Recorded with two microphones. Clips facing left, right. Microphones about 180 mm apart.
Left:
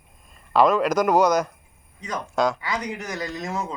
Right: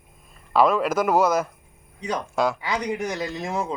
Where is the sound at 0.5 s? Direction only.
5° right (ahead or behind).